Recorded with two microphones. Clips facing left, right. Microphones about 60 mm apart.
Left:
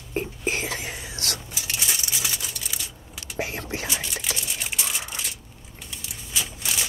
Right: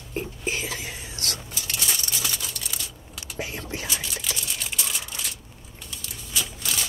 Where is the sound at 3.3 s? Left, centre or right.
Left.